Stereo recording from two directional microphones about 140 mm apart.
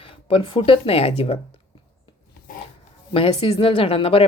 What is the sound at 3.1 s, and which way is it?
Speech, 40° left (ahead or behind).